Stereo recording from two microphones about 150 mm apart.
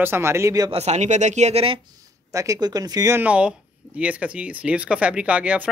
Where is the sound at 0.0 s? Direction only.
15° right (ahead or behind).